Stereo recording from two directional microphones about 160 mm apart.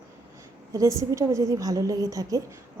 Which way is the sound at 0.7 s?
20° right (ahead or behind).